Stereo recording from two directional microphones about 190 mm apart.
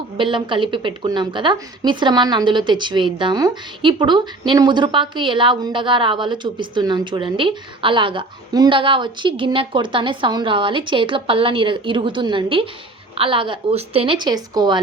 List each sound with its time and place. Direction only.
0.2 s speech: 25° right (ahead or behind)